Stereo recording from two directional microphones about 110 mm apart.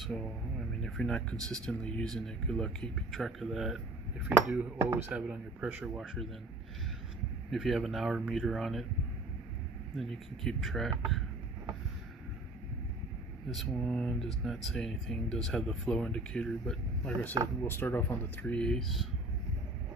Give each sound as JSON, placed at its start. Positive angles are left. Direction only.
{"t": 0.0, "sound": "speech", "side_deg": 0}
{"t": 7.5, "sound": "speech", "side_deg": 0}
{"t": 9.9, "sound": "speech", "side_deg": 0}
{"t": 13.5, "sound": "speech", "side_deg": 0}
{"t": 17.6, "sound": "speech", "side_deg": 20}
{"t": 18.4, "sound": "speech", "side_deg": 10}